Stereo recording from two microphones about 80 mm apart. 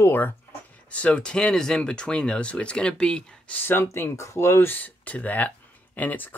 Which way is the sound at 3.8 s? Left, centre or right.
Left.